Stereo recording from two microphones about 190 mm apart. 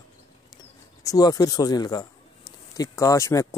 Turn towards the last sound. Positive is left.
turn(degrees=15)  # may be behind; listen again after turning